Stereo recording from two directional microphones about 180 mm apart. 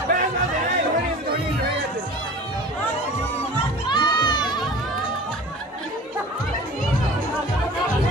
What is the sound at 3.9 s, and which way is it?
Music, 25° left (ahead or behind).